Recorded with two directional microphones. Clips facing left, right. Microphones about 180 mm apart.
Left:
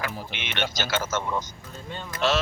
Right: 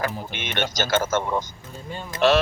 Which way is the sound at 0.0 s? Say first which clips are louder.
Right 5 dB; 45° right (ahead or behind).